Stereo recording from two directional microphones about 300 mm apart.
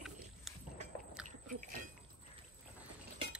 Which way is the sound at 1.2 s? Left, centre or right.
Right.